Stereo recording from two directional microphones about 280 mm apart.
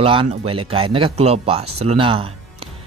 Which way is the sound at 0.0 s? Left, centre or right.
Centre.